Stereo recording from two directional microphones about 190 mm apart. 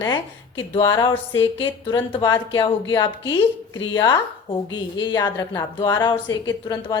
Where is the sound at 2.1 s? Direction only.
25° left (ahead or behind).